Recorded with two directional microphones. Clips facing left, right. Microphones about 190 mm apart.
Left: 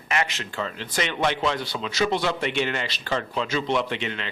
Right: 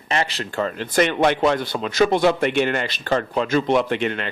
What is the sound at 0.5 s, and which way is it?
A man's voice, 50° right (ahead or behind).